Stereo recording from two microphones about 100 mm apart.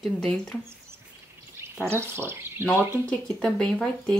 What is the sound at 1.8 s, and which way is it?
Speech, 25° right (ahead or behind).